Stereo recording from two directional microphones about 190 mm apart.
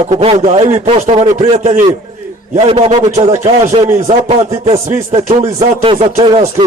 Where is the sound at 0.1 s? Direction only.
35° right (ahead or behind).